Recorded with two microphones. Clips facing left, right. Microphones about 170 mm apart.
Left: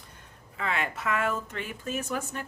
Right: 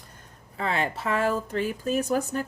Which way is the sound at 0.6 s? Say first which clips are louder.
Right 4 dB; 35° right (ahead or behind).